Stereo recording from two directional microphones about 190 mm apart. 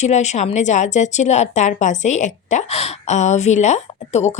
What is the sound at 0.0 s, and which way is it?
A woman's voice, 35° left (ahead or behind).